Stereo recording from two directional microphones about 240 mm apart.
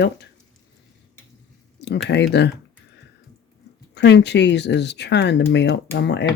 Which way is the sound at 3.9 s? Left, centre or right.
Left.